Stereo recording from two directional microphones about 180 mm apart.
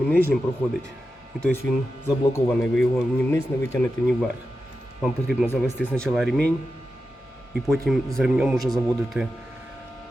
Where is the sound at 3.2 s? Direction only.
15° left (ahead or behind).